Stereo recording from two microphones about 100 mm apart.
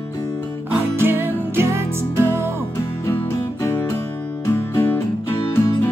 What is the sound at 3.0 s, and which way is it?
Music, 25° left (ahead or behind).